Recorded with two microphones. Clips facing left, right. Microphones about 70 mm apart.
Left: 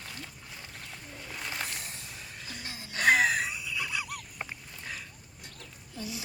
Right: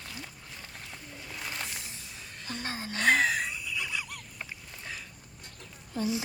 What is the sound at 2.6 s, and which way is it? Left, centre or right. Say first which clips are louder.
Gasp: right 7 dB; right.